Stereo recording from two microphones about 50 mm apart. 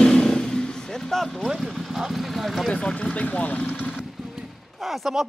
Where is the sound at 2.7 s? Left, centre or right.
Centre.